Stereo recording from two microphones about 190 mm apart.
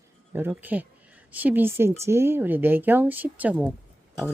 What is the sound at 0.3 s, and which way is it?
Speech, 10° right (ahead or behind).